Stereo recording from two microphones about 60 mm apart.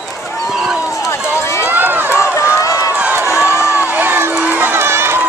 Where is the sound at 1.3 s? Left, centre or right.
Left.